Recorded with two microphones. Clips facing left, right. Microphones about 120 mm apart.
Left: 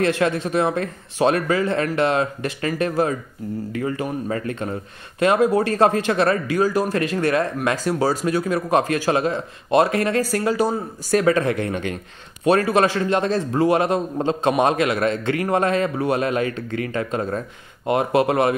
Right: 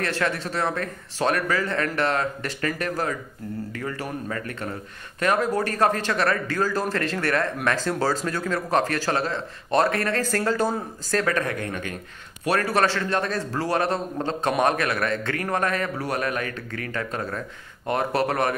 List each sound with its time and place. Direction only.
0.0 s speech: 20° left (ahead or behind)